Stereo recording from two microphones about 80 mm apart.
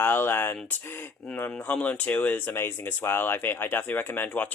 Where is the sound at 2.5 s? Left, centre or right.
Left.